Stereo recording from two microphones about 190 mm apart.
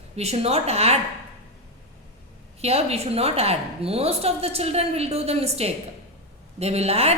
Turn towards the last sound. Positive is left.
turn(degrees=-30)  # may be behind; listen again after turning